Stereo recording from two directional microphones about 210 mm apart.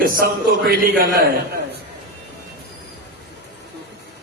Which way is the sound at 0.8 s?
45° right (ahead or behind).